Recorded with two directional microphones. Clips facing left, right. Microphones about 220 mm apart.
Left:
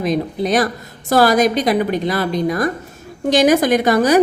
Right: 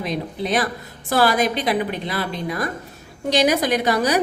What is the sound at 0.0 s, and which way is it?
A woman's voice, 45° left (ahead or behind).